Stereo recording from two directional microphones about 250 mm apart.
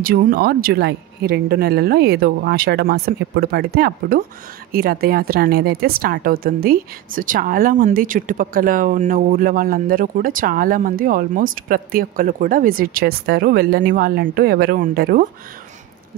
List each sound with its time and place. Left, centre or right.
0.0 s a woman's voice: right